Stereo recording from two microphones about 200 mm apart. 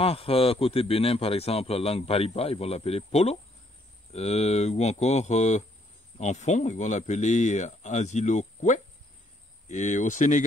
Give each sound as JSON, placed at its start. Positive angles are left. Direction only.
{"t": 0.0, "sound": "a man's voice", "side_deg": 30}